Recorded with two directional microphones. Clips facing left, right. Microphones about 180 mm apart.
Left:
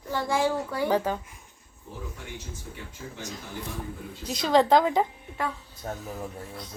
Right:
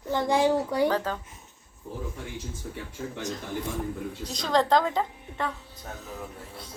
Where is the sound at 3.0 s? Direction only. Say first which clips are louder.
Right 6 dB; 40° right (ahead or behind).